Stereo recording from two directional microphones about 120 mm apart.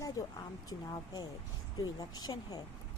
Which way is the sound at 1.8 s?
35° left (ahead or behind).